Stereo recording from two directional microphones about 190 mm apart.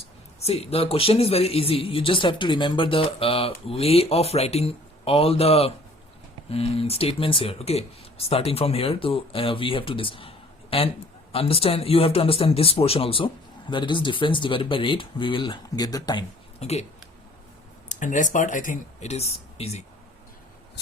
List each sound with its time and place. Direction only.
0.4 s speech: 30° left (ahead or behind)
16.6 s speech: 35° left (ahead or behind)
17.8 s speech: 40° left (ahead or behind)